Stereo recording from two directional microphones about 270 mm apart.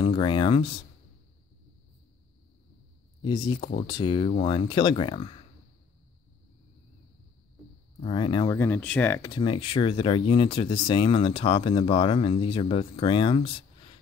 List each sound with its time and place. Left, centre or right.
0.0 s speech: centre
3.2 s speech: centre
8.0 s speech: centre